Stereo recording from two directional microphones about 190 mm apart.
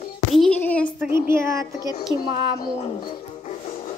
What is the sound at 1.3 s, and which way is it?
Speech, 15° right (ahead or behind).